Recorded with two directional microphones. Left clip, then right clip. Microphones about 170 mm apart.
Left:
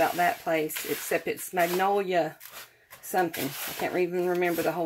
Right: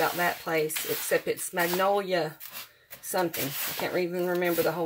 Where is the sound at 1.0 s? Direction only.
35° left (ahead or behind).